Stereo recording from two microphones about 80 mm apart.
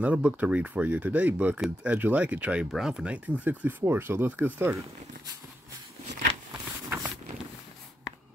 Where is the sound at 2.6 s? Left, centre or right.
Centre; by 4.8 s right.